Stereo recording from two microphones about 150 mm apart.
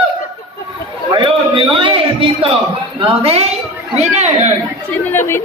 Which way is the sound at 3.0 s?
40° right (ahead or behind).